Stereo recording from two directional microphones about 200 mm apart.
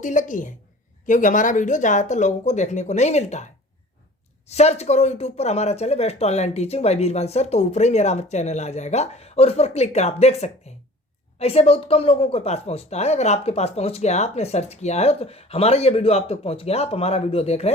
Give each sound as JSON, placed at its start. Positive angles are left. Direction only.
{"t": 0.0, "sound": "speech", "side_deg": 40}